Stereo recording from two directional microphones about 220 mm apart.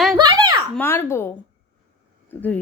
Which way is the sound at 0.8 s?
10° left (ahead or behind).